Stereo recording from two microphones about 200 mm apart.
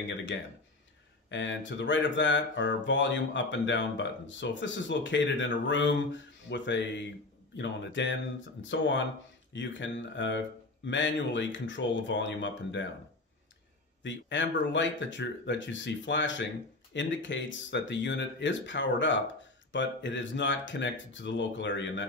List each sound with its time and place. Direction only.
0.1 s speech: 70° left (ahead or behind)
14.0 s speech: 65° left (ahead or behind)